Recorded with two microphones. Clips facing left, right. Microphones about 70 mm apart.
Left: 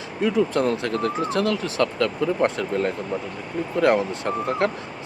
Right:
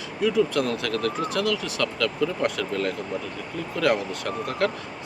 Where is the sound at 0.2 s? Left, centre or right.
Left.